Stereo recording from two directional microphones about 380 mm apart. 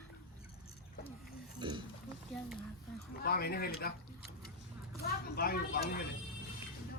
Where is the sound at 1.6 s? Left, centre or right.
Centre.